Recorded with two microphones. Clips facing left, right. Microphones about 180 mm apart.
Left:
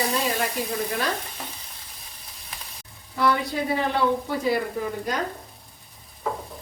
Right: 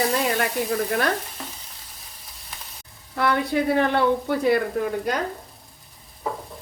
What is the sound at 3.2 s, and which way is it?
Speech, 60° right (ahead or behind).